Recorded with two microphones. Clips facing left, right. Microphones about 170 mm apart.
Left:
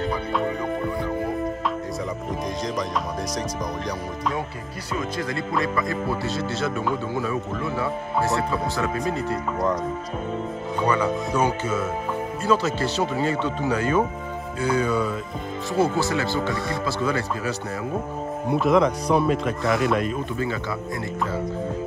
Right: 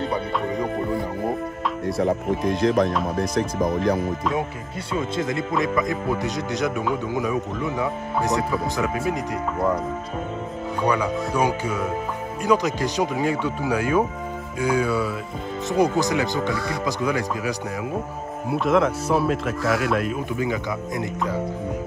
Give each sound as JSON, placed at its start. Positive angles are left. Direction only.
{"t": 2.0, "sound": "speech", "side_deg": -65}
{"t": 4.9, "sound": "speech", "side_deg": -25}
{"t": 10.8, "sound": "speech", "side_deg": -10}
{"t": 18.5, "sound": "speech", "side_deg": 0}